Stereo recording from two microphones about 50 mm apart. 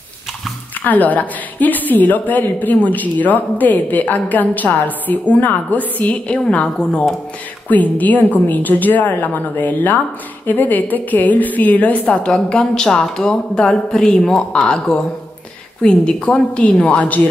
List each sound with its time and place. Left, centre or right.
0.8 s a woman's voice: left; by 7.1 s centre
7.7 s a woman's voice: left
12.4 s a woman's voice: centre
16.8 s a woman's voice: left